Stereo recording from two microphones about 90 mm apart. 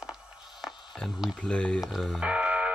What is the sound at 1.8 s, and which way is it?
Speech, centre (ahead or behind).